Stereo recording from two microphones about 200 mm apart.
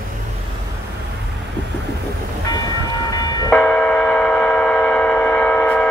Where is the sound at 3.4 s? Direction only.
5° left (ahead or behind).